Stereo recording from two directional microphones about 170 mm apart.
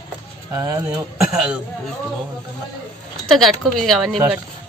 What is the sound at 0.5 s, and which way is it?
Speech, 20° right (ahead or behind).